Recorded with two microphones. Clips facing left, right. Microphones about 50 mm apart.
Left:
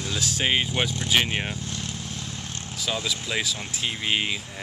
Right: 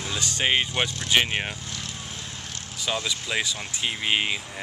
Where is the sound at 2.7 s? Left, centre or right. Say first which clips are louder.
Even; centre.